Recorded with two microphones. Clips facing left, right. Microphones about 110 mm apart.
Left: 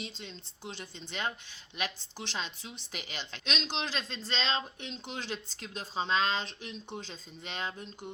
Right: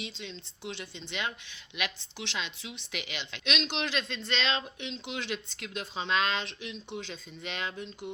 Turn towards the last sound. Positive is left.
turn(degrees=35)  # may be behind; listen again after turning